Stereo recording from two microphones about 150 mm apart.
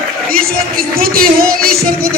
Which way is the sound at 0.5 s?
80° right.